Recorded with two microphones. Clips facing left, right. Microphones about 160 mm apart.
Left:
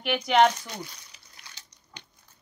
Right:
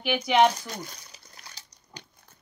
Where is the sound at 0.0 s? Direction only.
5° right (ahead or behind).